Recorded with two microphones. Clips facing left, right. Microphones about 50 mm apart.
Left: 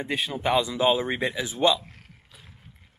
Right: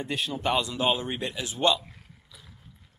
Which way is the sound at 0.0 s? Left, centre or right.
Centre.